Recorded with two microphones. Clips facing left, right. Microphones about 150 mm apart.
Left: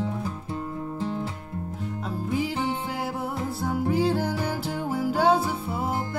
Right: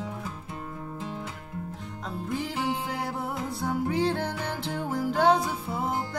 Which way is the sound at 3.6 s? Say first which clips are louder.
Left 2 dB; 5° left (ahead or behind).